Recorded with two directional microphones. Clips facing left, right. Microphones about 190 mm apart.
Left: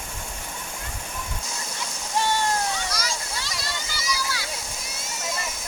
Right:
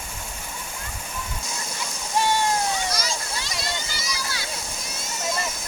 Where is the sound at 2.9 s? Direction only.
25° right (ahead or behind).